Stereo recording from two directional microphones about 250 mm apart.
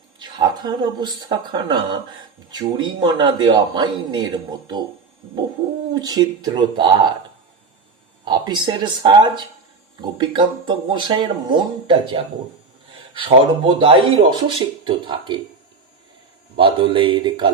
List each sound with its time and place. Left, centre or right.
0.2 s a man's voice: centre
5.9 s a man's voice: centre
8.2 s a man's voice: centre
16.6 s speech: centre